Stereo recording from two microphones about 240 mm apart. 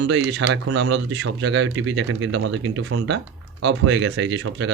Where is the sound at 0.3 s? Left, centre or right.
Right.